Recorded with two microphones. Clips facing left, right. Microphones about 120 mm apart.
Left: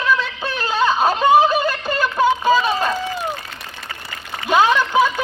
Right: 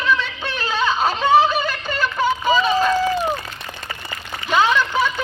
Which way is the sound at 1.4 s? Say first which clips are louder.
Left 2 dB; 45° left (ahead or behind).